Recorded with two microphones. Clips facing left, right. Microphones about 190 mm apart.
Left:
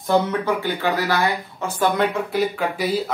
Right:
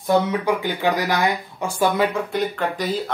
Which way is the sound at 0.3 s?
15° right (ahead or behind).